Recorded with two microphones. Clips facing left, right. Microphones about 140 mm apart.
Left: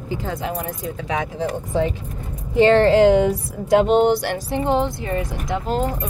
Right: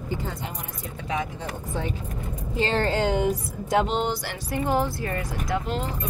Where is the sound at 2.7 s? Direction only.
80° left.